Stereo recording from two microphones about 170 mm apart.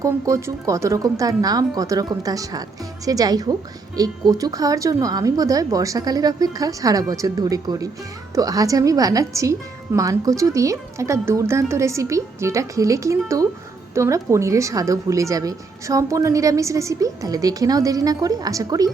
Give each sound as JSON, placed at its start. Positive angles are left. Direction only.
{"t": 0.0, "sound": "speech", "side_deg": -20}